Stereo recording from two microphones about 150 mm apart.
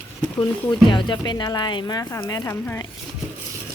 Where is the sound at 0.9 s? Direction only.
30° left (ahead or behind).